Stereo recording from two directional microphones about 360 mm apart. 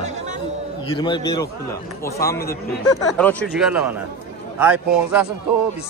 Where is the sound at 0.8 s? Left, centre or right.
Centre.